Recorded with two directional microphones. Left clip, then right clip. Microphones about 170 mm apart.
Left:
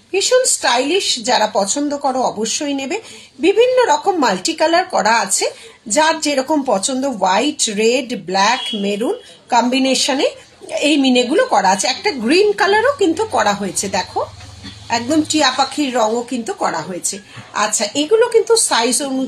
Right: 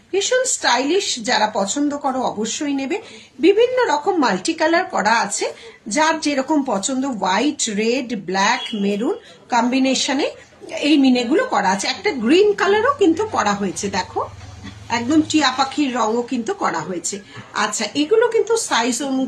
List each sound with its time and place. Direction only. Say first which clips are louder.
0.6 s a woman's voice: left 2 dB; 30° left (ahead or behind)